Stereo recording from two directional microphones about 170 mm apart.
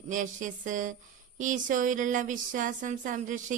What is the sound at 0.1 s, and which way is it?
A woman's voice, 50° right (ahead or behind).